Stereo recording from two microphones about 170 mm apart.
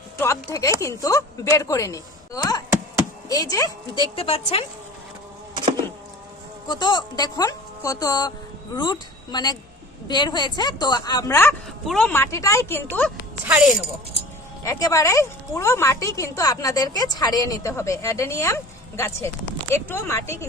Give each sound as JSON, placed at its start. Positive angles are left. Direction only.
{"t": 0.2, "sound": "a woman's voice", "side_deg": 20}
{"t": 4.1, "sound": "speech", "side_deg": 35}
{"t": 6.7, "sound": "a woman's voice", "side_deg": 25}
{"t": 13.4, "sound": "speech", "side_deg": -5}
{"t": 14.6, "sound": "a woman's voice", "side_deg": 20}